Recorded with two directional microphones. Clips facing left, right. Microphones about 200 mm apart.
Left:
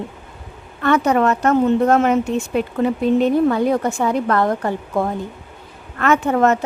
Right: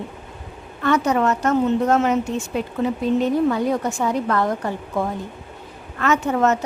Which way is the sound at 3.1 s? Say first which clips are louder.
Left 3 dB; 60° left (ahead or behind).